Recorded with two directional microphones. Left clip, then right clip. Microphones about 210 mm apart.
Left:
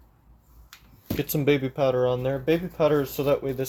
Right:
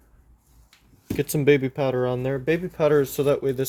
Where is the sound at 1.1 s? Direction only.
55° right (ahead or behind).